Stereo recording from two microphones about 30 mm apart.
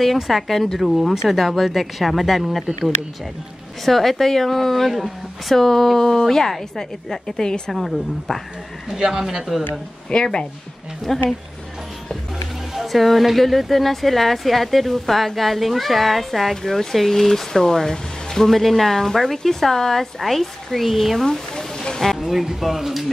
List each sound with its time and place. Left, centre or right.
0.0 s speech: centre
3.8 s speech: centre
7.4 s speech: left
7.7 s speech: centre
8.9 s speech: centre
10.1 s speech: left
11.1 s speech: centre
12.8 s speech: centre
20.2 s speech: centre
21.2 s speech: centre
22.2 s speech: centre